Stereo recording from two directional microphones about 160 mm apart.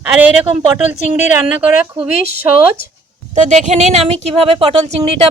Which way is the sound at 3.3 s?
50° right (ahead or behind).